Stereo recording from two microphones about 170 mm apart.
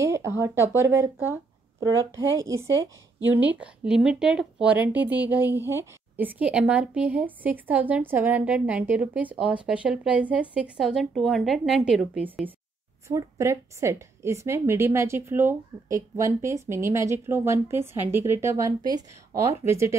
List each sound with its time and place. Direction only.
0.0 s speech: 15° right (ahead or behind)
3.3 s speech: 10° right (ahead or behind)